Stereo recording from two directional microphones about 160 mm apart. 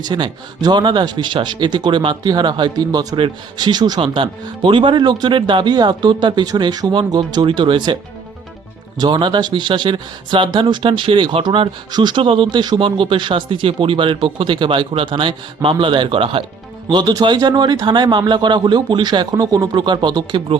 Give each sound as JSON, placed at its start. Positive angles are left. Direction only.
{"t": 0.0, "sound": "speech", "side_deg": -25}
{"t": 9.0, "sound": "speech", "side_deg": -30}